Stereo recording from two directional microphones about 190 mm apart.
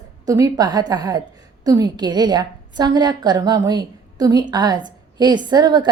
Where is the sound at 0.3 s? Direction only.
20° right (ahead or behind).